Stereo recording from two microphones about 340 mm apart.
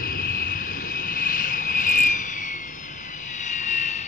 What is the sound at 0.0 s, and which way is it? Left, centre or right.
Vehicle, left.